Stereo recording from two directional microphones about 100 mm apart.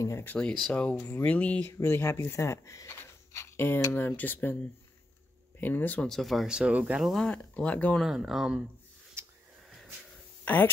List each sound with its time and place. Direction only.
0.0 s speech: 30° left (ahead or behind)
0.3 s speech: 10° left (ahead or behind)
5.6 s speech: 20° left (ahead or behind)
6.0 s speech: centre (ahead or behind)
7.1 s speech: 5° left (ahead or behind)
8.0 s speech: 5° right (ahead or behind)
10.4 s speech: 20° left (ahead or behind)